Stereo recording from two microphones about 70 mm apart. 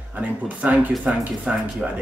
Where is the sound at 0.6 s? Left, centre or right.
Right.